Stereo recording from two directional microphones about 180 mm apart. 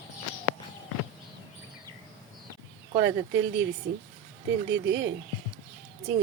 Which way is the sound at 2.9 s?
70° right (ahead or behind).